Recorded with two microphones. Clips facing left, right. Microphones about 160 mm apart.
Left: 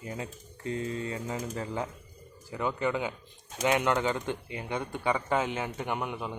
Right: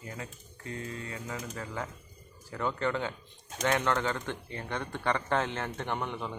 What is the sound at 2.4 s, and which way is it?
Speech, 10° left (ahead or behind).